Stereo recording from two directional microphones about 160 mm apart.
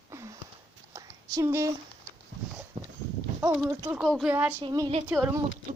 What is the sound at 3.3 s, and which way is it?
Speech, 10° right (ahead or behind).